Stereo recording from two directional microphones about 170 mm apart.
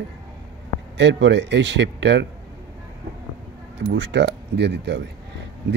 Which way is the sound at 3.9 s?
90° right.